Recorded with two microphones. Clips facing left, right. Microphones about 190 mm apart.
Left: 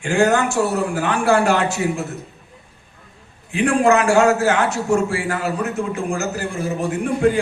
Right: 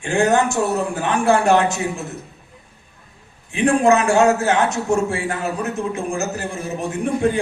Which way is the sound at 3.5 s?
20° right (ahead or behind).